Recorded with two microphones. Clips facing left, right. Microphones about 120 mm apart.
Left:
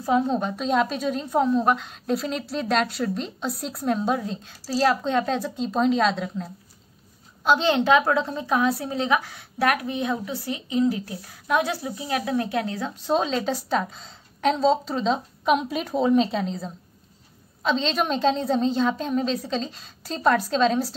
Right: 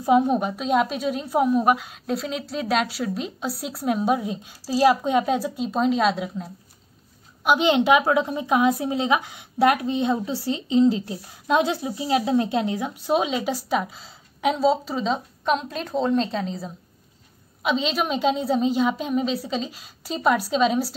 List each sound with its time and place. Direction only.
0.0 s a woman's voice: 15° right (ahead or behind)
15.4 s a woman's voice: 10° left (ahead or behind); by 20.9 s 10° right (ahead or behind)